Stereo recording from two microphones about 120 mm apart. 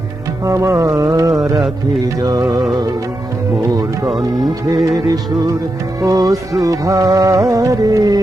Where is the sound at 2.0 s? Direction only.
35° right (ahead or behind).